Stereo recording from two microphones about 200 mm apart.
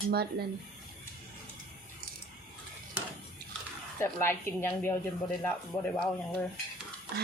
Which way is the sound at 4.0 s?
15° left (ahead or behind).